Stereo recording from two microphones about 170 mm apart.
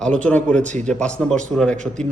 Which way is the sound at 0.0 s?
5° left (ahead or behind).